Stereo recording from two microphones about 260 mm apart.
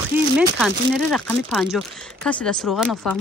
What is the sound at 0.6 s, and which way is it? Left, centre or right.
Speech, centre.